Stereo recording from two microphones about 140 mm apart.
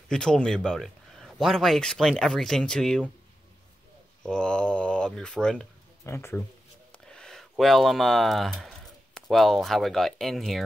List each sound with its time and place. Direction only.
0.1 s speech: 5° left (ahead or behind)
4.2 s speech: 5° left (ahead or behind)
6.0 s speech: 20° left (ahead or behind)
6.9 s speech: 5° left (ahead or behind)